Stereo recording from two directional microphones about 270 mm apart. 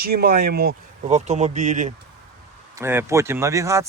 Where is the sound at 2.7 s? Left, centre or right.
Centre.